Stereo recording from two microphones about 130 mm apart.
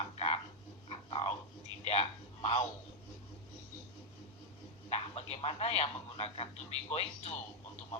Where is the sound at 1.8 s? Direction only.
55° left (ahead or behind).